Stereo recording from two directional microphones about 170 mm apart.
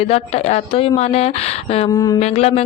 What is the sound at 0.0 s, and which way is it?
A woman's voice, 35° left (ahead or behind).